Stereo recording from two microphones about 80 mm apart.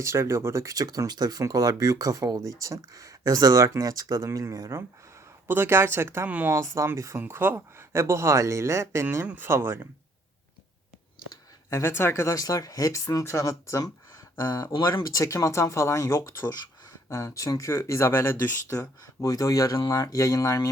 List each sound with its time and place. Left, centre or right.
0.0 s speech: right
5.5 s speech: right
6.2 s speech: centre
6.5 s speech: right
11.7 s speech: left
14.7 s speech: left
15.1 s speech: left